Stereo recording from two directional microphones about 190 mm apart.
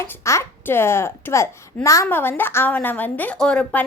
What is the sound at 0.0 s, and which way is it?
A child's voice, 15° left (ahead or behind).